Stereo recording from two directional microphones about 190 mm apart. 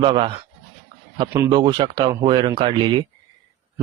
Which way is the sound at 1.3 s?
15° right (ahead or behind).